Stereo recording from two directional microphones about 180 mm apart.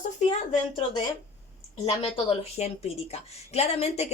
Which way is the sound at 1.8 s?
30° left (ahead or behind).